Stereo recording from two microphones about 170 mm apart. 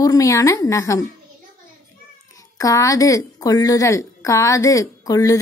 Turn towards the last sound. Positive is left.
turn(degrees=20)  # may be behind; listen again after turning